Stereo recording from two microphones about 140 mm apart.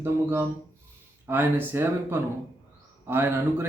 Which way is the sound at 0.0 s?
15° right (ahead or behind).